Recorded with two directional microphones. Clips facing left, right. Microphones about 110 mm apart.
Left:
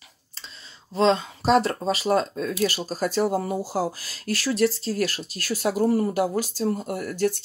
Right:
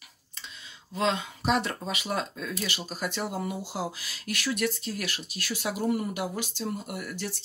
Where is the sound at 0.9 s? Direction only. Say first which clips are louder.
Left 7 dB; 30° left (ahead or behind).